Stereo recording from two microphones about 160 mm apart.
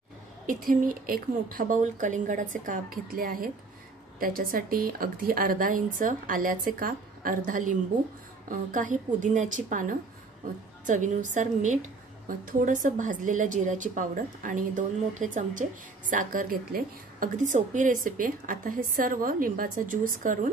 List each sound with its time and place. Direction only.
0.5 s a woman's voice: 60° right (ahead or behind)